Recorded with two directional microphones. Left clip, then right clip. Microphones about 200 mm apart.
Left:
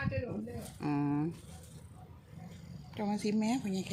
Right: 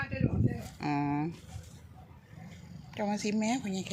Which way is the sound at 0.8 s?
10° right (ahead or behind).